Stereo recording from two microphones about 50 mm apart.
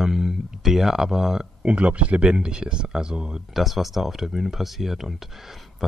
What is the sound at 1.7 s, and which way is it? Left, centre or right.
Speech, right.